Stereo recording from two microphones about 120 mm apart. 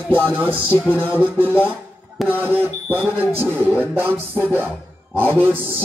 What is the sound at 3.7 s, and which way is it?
Speech, 15° right (ahead or behind).